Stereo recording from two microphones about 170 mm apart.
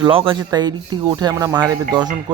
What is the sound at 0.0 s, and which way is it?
Speech, 30° right (ahead or behind).